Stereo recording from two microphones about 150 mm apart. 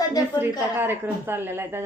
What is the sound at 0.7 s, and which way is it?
A woman's voice, 15° right (ahead or behind).